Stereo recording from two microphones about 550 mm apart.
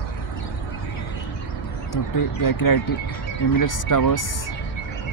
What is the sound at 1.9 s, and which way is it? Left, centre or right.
Speech, left.